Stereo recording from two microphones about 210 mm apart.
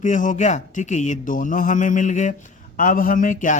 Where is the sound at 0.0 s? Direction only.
35° left (ahead or behind).